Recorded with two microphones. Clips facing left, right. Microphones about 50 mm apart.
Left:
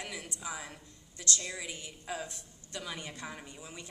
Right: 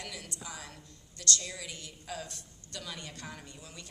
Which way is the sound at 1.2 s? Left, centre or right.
Centre.